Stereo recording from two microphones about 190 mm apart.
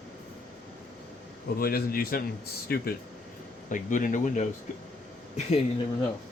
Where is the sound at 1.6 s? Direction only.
50° left (ahead or behind).